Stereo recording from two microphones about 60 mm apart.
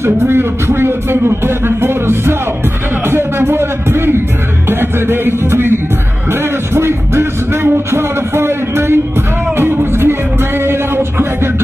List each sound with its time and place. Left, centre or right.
0.0 s speech: right
3.1 s music: right
10.6 s a sound: right